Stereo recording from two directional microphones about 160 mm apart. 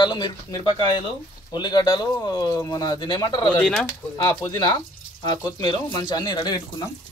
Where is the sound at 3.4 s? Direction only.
5° left (ahead or behind).